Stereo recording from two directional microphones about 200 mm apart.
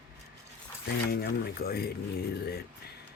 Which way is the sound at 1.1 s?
50° left (ahead or behind).